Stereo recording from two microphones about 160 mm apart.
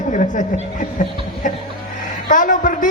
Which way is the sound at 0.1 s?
50° left (ahead or behind).